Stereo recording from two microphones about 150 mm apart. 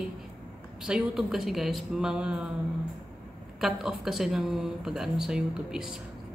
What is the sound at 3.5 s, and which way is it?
Speech, centre (ahead or behind).